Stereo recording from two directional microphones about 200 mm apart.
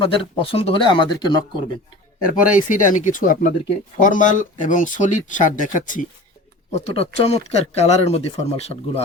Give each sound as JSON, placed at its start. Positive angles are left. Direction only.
{"t": 0.0, "sound": "speech", "side_deg": 30}
{"t": 2.3, "sound": "speech", "side_deg": 40}